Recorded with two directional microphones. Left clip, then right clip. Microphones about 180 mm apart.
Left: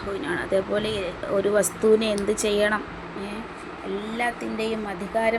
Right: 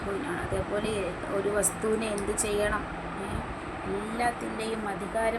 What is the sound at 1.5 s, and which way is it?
A woman's voice, 45° left (ahead or behind).